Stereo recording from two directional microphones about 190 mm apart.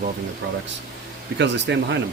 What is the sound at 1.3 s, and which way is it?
Speech, 65° right (ahead or behind).